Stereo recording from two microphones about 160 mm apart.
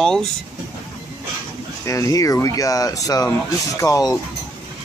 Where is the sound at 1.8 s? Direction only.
20° left (ahead or behind).